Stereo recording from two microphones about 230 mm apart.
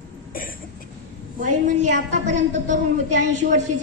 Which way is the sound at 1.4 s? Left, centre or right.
Right.